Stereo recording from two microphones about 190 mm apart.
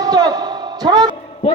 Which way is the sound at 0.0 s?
20° right (ahead or behind).